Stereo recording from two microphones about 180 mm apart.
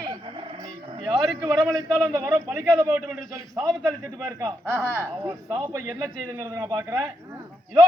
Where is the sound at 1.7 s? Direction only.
20° right (ahead or behind).